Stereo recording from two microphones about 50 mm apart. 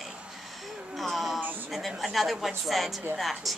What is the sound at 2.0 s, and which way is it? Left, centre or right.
A woman's voice, centre.